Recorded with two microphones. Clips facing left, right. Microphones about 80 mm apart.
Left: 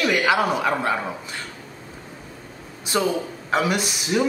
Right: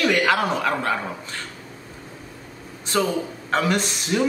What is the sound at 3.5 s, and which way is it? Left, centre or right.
Speech, centre.